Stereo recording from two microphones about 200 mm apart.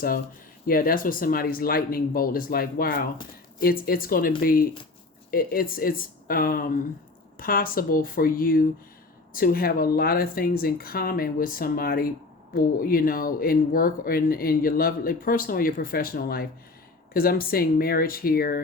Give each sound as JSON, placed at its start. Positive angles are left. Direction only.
{"t": 0.7, "sound": "speech", "side_deg": 45}